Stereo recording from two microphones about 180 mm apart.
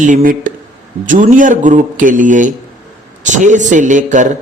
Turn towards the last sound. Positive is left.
turn(degrees=-45)  # may be behind; listen again after turning